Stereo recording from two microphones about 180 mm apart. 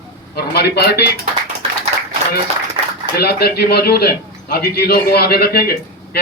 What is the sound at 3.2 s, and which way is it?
A man's voice, 60° left (ahead or behind).